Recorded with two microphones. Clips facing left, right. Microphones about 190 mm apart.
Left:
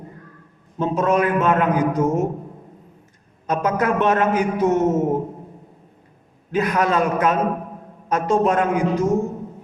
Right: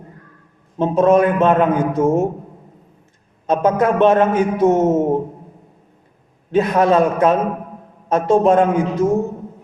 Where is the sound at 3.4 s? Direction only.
25° right (ahead or behind).